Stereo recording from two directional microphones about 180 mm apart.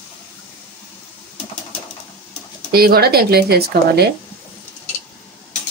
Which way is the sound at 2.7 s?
60° right (ahead or behind).